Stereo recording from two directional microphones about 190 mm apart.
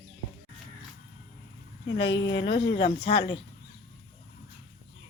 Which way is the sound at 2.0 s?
70° left (ahead or behind).